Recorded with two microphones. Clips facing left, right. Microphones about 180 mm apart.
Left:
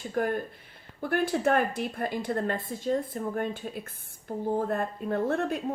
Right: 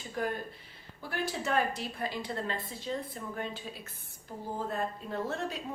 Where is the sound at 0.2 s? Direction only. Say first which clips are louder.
Left 6 dB; 50° left (ahead or behind).